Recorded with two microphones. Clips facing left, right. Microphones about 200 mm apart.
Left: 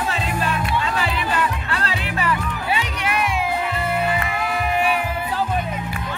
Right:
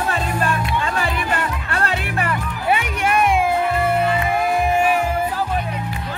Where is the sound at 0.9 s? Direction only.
50° right (ahead or behind).